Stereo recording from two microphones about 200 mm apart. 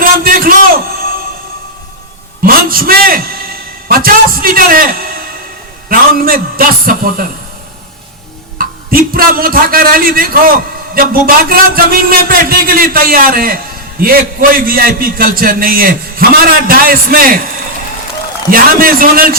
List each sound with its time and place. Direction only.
0.0 s a sound: 45° right (ahead or behind)
2.4 s a man's voice: 45° right (ahead or behind)
8.5 s a man's voice: 45° right (ahead or behind)
14.7 s a man's voice: 45° right (ahead or behind)
18.5 s a man's voice: 45° right (ahead or behind)